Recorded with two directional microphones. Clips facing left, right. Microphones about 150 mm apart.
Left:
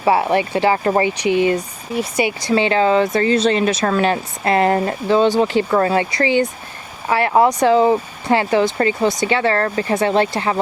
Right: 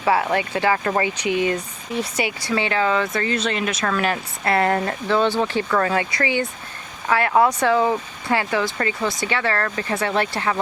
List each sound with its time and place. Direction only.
0.0 s speech: 30° left (ahead or behind)
1.5 s speech: 10° left (ahead or behind)
2.4 s speech: 30° left (ahead or behind)
5.7 s speech: 30° left (ahead or behind)